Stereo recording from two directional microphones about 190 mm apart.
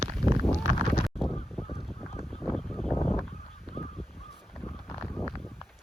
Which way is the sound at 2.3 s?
10° left (ahead or behind).